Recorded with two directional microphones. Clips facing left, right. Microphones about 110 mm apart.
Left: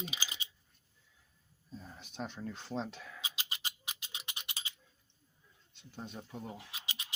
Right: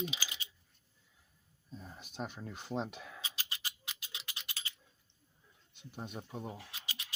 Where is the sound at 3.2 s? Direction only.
20° left (ahead or behind).